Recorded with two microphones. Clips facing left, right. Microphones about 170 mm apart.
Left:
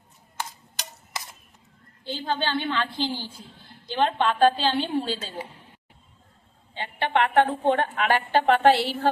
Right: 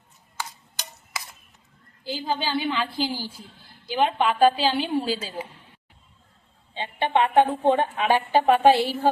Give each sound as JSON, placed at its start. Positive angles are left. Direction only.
{"t": 2.0, "sound": "a woman's voice", "side_deg": -10}
{"t": 6.7, "sound": "a woman's voice", "side_deg": -15}